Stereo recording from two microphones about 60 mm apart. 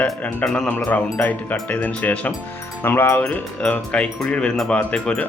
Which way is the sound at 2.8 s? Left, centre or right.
Left.